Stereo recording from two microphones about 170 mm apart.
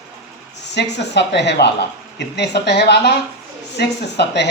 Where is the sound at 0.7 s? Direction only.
90° left.